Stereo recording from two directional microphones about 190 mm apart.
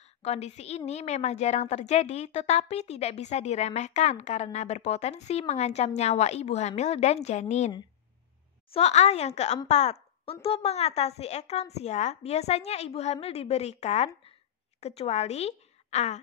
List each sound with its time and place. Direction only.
0.2 s a woman's voice: 35° left (ahead or behind)
8.7 s a woman's voice: 35° left (ahead or behind)